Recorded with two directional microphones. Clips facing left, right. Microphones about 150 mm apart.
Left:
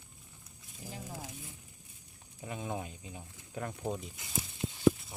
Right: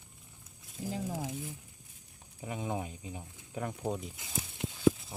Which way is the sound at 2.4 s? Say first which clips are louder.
Right 2 dB; 15° right (ahead or behind).